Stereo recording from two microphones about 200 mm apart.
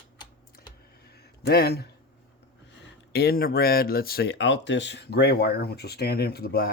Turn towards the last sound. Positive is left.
turn(degrees=50)  # may be behind; listen again after turning